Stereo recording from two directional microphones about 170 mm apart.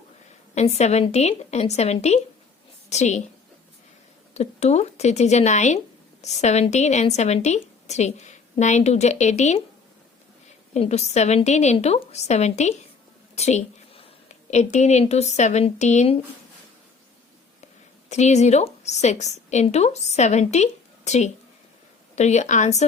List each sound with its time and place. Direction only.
0.5 s a woman's voice: 40° left (ahead or behind)
4.4 s a woman's voice: 40° left (ahead or behind)
10.8 s a woman's voice: 40° left (ahead or behind)
13.3 s a sound: 40° left (ahead or behind)
14.5 s speech: 45° left (ahead or behind)
18.1 s a woman's voice: 40° left (ahead or behind)